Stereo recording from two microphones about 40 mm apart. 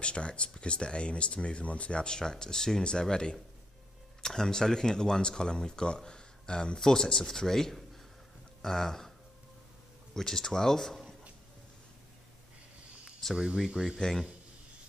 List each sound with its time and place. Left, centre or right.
0.0 s speech: left
4.4 s speech: centre
10.1 s speech: centre
13.4 s speech: right
13.9 s speech: centre